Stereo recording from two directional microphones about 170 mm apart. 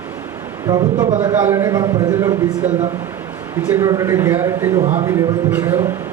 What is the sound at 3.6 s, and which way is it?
Speech, 10° right (ahead or behind).